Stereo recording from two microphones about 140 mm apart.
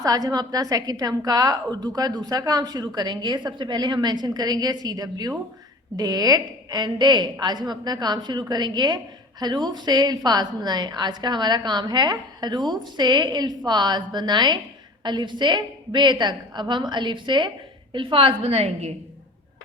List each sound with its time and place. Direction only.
0.0 s a woman's voice: 25° right (ahead or behind); by 18.9 s 50° right (ahead or behind)